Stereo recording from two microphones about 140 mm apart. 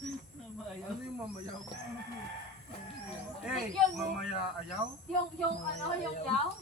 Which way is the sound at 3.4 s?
Centre (ahead or behind).